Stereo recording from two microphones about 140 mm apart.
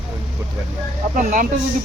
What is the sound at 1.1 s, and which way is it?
Speech, 75° right (ahead or behind).